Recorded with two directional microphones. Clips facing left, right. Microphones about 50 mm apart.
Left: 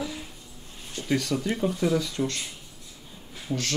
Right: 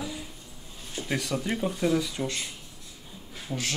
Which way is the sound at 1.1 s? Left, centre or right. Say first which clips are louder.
Left 3 dB; centre.